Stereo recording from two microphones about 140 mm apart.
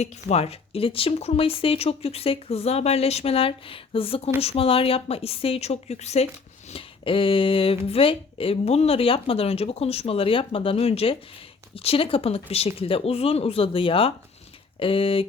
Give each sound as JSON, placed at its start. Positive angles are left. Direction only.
{"t": 0.0, "sound": "speech", "side_deg": 50}
{"t": 6.7, "sound": "speech", "side_deg": 40}